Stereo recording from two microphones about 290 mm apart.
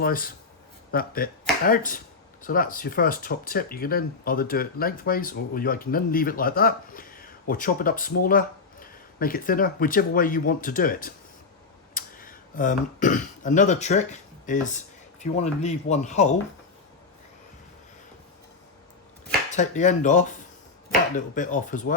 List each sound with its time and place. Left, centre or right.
0.0 s speech: left
19.5 s speech: left
21.3 s speech: left